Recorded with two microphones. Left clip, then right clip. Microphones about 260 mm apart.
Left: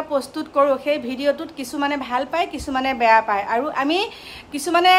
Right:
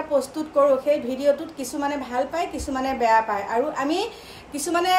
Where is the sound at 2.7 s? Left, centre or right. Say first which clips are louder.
Left 4 dB; left.